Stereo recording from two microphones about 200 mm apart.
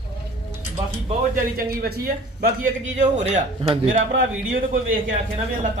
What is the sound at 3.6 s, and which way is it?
Speech, 25° right (ahead or behind).